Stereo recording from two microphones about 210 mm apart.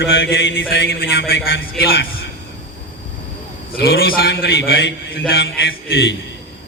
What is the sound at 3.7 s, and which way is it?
A man's voice, 45° left (ahead or behind).